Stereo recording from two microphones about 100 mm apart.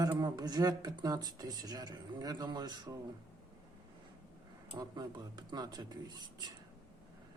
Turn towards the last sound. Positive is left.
turn(degrees=-45)  # may be behind; listen again after turning